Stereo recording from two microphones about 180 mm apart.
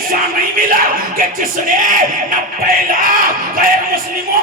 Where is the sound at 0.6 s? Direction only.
50° right (ahead or behind).